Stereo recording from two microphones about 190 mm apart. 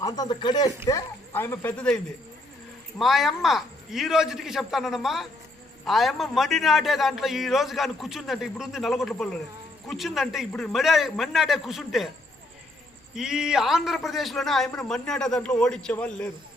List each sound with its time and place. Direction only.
0.0 s speech: 20° left (ahead or behind)
3.0 s a man's voice: centre (ahead or behind)
13.1 s a man's voice: 5° right (ahead or behind)